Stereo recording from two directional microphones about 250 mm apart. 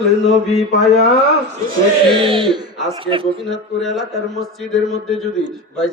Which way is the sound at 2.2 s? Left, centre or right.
Right.